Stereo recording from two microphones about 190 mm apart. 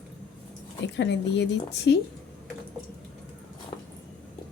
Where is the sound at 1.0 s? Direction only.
65° left (ahead or behind).